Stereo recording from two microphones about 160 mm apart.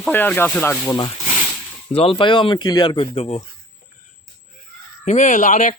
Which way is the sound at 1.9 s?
35° left (ahead or behind).